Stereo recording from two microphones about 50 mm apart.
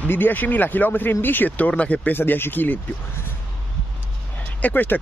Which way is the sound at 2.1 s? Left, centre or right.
Left.